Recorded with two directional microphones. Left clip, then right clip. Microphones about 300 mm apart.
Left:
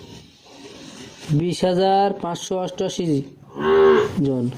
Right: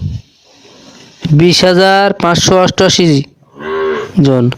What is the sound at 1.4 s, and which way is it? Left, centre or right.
A man's voice, right.